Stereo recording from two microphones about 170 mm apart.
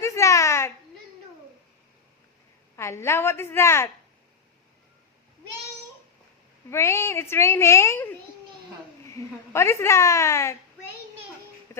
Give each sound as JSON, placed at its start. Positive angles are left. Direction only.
{"t": 0.0, "sound": "babbling", "side_deg": 15}
{"t": 2.7, "sound": "a woman's voice", "side_deg": 15}
{"t": 6.7, "sound": "a woman's voice", "side_deg": 15}
{"t": 11.7, "sound": "a sound", "side_deg": 15}